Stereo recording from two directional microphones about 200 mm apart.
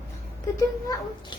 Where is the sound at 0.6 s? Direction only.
15° left (ahead or behind).